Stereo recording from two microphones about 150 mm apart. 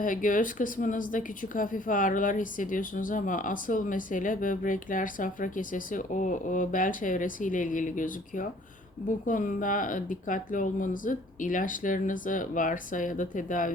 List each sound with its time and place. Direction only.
0.0 s speech: 60° left (ahead or behind)